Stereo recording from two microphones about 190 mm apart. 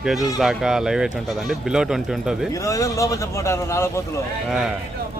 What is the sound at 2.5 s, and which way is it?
Speech, 15° left (ahead or behind).